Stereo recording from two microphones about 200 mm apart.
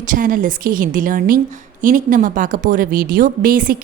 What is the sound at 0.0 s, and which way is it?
A woman's voice, 40° right (ahead or behind).